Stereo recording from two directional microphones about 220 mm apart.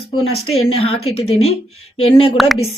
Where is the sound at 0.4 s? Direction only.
75° left (ahead or behind).